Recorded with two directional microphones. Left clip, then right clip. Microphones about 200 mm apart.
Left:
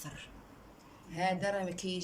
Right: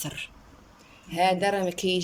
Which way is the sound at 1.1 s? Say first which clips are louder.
Right 10 dB; 40° right (ahead or behind).